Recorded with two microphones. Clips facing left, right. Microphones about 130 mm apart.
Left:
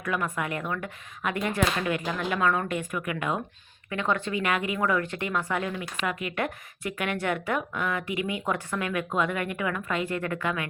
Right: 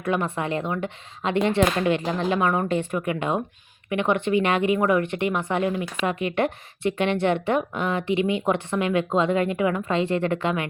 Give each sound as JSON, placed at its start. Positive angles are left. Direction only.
{"t": 0.0, "sound": "a woman's voice", "side_deg": -25}